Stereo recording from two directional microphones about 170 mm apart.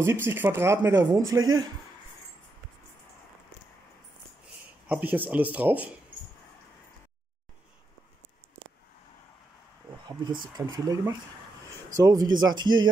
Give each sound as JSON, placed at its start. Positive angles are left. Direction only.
{"t": 0.0, "sound": "speech", "side_deg": -15}
{"t": 4.8, "sound": "speech", "side_deg": -10}
{"t": 10.6, "sound": "speech", "side_deg": -20}